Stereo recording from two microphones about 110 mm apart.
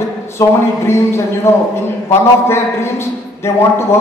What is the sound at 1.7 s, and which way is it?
A man's voice, 25° left (ahead or behind).